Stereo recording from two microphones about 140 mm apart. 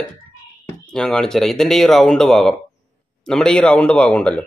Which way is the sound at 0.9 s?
5° left (ahead or behind).